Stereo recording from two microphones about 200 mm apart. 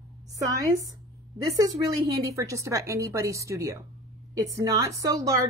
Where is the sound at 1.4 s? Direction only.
15° right (ahead or behind).